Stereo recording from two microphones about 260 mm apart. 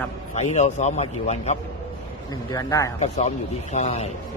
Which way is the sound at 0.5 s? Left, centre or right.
Left.